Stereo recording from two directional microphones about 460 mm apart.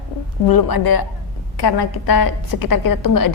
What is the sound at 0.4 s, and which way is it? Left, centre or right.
A woman's voice, left.